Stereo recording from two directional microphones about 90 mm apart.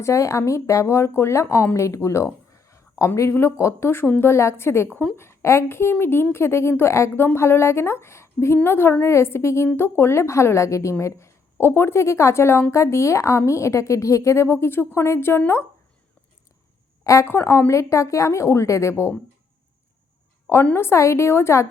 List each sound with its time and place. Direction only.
0.0 s a woman's voice: 35° left (ahead or behind)
1.7 s a sound: 35° left (ahead or behind)
3.2 s a woman's voice: 30° left (ahead or behind)
17.0 s speech: 35° left (ahead or behind)
17.2 s a woman's voice: 25° left (ahead or behind)
20.7 s a woman's voice: 30° left (ahead or behind)